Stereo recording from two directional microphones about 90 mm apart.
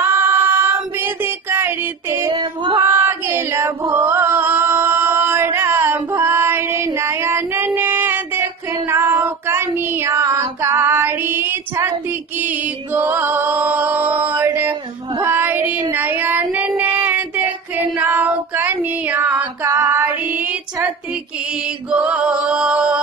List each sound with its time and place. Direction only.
0.0 s music: 25° right (ahead or behind)
2.1 s female singing: 65° right (ahead or behind)
2.8 s female singing: 25° right (ahead or behind)
15.2 s child singing: 20° right (ahead or behind)
21.9 s music: 15° right (ahead or behind)